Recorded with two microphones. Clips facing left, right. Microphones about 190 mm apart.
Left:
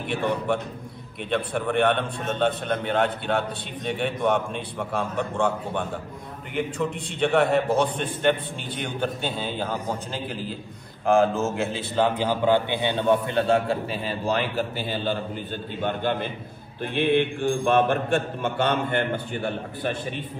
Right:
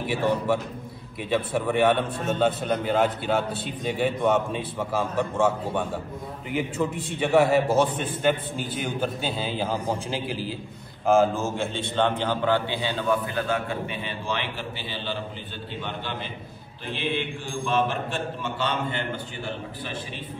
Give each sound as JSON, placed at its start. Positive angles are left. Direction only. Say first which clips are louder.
{"t": 1.3, "sound": "a man's voice", "louder": "even", "side_deg": -5}